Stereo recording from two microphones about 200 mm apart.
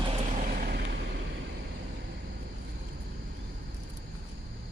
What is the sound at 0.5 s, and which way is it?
Vehicle, 50° right (ahead or behind).